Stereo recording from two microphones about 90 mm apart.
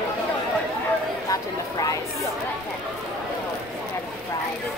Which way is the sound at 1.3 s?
40° left (ahead or behind).